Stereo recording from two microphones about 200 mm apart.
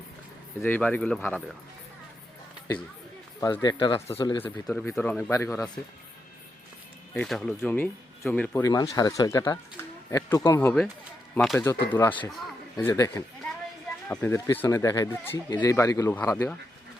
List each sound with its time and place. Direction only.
0.6 s speech: 10° left (ahead or behind)
3.4 s speech: 20° left (ahead or behind)
4.6 s speech: 5° left (ahead or behind)
5.3 s speech: 15° left (ahead or behind)
7.1 s speech: 5° left (ahead or behind)